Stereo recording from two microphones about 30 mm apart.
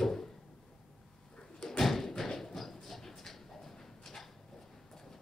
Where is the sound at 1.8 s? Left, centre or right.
Centre.